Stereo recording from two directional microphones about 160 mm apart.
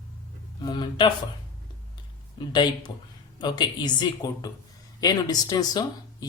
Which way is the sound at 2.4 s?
30° left (ahead or behind).